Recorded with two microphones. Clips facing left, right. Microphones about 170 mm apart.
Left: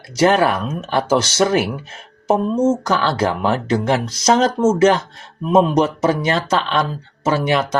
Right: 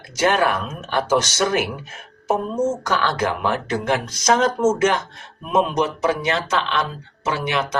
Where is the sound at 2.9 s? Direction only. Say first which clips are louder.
Left 3 dB; 30° left (ahead or behind).